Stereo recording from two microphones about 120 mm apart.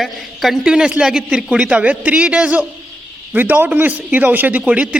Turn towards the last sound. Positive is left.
turn(degrees=-10)  # may be behind; listen again after turning